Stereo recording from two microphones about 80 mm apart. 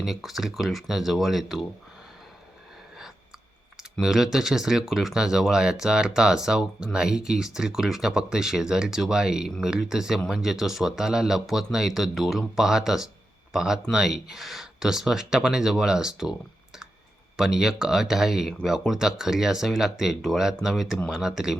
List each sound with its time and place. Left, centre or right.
0.0 s speech: centre
4.0 s speech: centre
17.3 s speech: centre